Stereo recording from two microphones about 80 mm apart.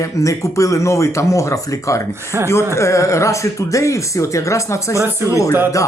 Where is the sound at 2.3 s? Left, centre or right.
Right.